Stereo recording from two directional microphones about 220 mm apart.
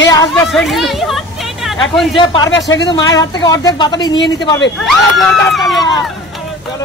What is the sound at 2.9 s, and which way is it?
Speech, 20° left (ahead or behind).